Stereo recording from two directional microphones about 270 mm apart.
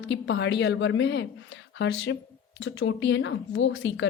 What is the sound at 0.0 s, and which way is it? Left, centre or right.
A woman's voice, left.